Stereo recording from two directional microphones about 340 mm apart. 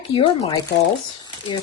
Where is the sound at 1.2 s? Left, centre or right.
Centre.